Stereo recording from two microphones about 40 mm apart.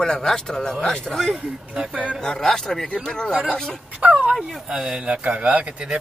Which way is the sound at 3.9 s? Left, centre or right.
Right.